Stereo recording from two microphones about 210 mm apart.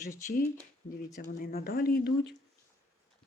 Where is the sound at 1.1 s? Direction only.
40° left (ahead or behind).